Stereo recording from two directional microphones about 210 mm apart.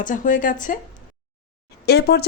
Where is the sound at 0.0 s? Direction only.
40° left (ahead or behind).